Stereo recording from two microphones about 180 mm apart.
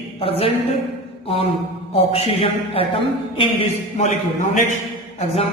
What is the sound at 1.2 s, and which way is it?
Speech, 35° left (ahead or behind).